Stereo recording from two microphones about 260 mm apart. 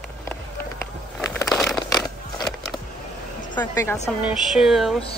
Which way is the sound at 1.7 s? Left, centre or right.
Centre.